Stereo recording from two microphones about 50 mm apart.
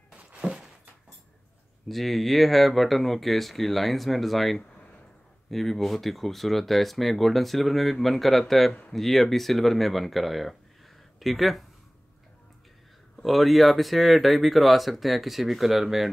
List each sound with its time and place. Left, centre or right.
0.1 s a sound: centre
1.9 s speech: centre
13.2 s speech: centre